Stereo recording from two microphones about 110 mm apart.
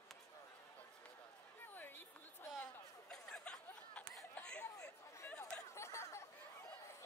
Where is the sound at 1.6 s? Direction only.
20° left (ahead or behind).